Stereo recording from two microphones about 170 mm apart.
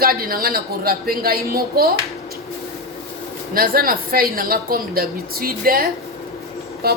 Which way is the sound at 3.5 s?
60° right (ahead or behind).